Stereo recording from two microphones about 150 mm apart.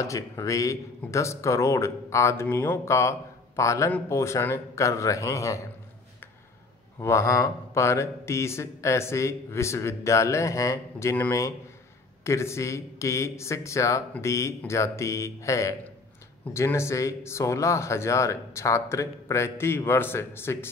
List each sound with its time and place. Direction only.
0.0 s speech: 20° left (ahead or behind)
7.0 s speech: 20° left (ahead or behind)